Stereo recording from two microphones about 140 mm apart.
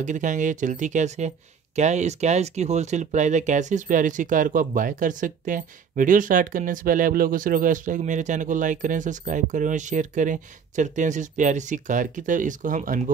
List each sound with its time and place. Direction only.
0.0 s speech: 65° right (ahead or behind)